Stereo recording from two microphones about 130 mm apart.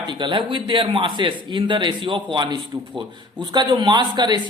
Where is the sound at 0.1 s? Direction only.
35° right (ahead or behind).